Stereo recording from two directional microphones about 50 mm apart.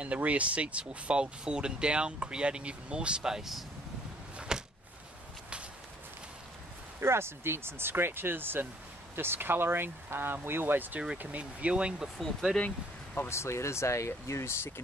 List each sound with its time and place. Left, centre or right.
0.0 s speech: right; by 3.6 s centre
4.4 s a sound: centre
7.0 s speech: right
11.3 s speech: right
12.2 s speech: centre
12.6 s speech: left
13.3 s speech: left